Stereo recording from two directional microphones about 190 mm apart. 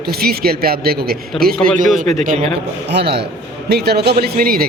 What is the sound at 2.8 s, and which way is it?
Speech, 60° right (ahead or behind).